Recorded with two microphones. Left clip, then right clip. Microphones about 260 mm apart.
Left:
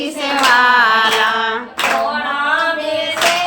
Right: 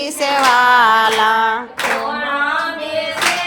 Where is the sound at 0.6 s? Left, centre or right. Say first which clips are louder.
Right 2 dB; right.